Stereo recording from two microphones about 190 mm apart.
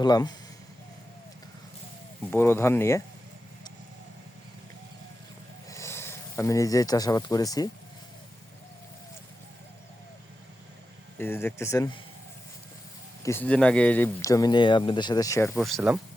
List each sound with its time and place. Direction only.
0.0 s speech: 20° left (ahead or behind)
2.3 s speech: 10° left (ahead or behind)
5.6 s speech: 15° left (ahead or behind)
11.2 s speech: 10° left (ahead or behind)
13.2 s speech: 10° left (ahead or behind)
15.5 s speech: centre (ahead or behind)